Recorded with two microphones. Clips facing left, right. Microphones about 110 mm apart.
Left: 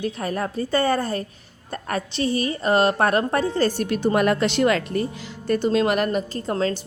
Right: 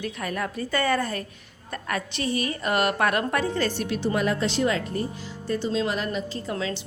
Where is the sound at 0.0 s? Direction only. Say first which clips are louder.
Left 4 dB; 35° left (ahead or behind).